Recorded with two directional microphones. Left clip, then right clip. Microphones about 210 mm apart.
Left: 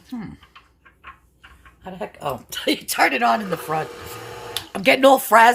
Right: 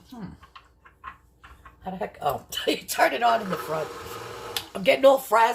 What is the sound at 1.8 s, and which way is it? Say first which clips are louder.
Speech: even; 45° left (ahead or behind).